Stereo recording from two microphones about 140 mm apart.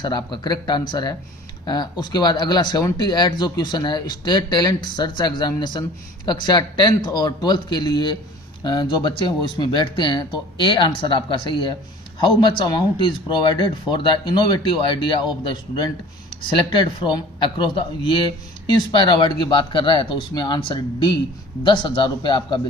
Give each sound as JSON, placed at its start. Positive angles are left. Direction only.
{"t": 0.0, "sound": "a man's voice", "side_deg": 30}